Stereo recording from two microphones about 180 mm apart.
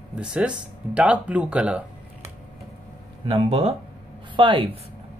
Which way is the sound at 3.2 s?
35° right (ahead or behind).